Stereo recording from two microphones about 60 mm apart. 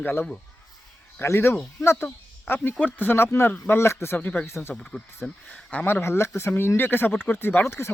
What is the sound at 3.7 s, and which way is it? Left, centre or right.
Speech, left.